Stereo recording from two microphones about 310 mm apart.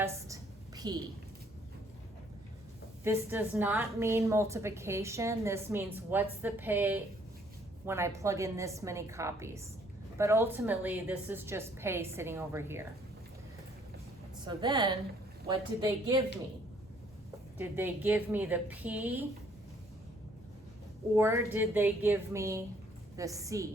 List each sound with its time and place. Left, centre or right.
0.8 s a woman's voice: centre
3.0 s a woman's voice: centre
14.4 s a woman's voice: centre
17.6 s a woman's voice: centre
21.2 s a woman's voice: centre